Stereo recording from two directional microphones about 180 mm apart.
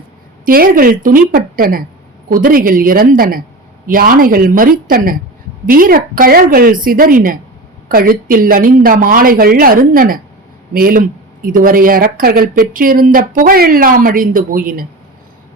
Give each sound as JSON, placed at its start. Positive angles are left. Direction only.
{"t": 0.4, "sound": "speech", "side_deg": -55}